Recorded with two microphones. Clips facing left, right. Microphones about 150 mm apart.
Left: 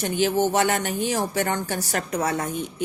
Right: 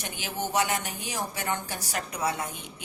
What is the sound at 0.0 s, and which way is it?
A woman's voice, 55° left (ahead or behind).